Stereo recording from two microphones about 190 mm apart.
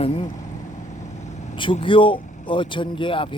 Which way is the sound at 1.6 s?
25° left (ahead or behind).